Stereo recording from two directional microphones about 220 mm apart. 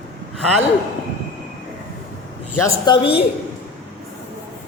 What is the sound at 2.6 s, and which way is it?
Speech, 20° left (ahead or behind).